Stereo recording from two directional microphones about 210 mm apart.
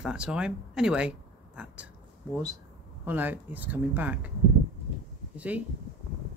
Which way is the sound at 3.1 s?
10° right (ahead or behind).